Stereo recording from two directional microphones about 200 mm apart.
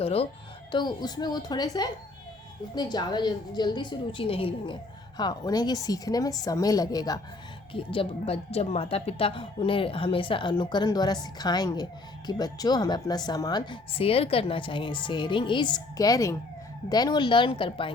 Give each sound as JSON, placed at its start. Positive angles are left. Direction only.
{"t": 0.0, "sound": "a woman's voice", "side_deg": 30}